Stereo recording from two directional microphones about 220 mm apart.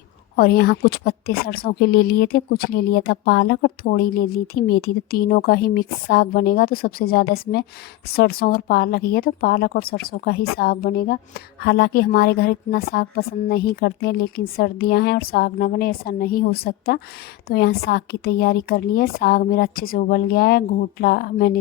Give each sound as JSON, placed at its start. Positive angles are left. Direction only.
{"t": 0.3, "sound": "a woman's voice", "side_deg": 45}